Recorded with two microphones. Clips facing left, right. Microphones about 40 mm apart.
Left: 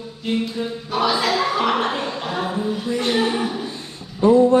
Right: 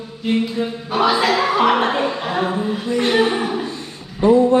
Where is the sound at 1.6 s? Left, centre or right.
Centre.